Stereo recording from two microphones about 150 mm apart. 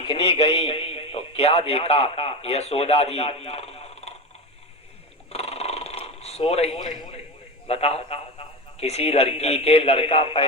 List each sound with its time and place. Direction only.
0.0 s a man's voice: 35° left (ahead or behind)
5.3 s purr: 45° left (ahead or behind)
7.7 s a man's voice: 40° left (ahead or behind)